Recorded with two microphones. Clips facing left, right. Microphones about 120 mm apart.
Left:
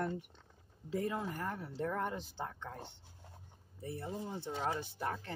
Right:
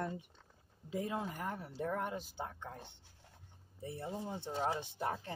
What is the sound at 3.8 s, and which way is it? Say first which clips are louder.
Speech: even; 20° right (ahead or behind).